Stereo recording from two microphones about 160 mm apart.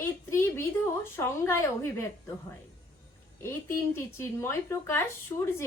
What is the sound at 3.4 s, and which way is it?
A woman's voice, 15° left (ahead or behind).